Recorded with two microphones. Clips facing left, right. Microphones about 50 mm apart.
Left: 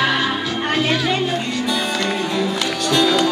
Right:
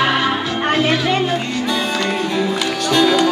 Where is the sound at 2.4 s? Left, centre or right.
Centre.